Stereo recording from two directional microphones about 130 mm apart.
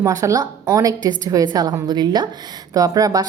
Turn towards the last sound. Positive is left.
turn(degrees=-30)  # may be behind; listen again after turning